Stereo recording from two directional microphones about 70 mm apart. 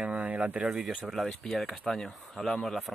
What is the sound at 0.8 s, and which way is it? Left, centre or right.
Speech, centre.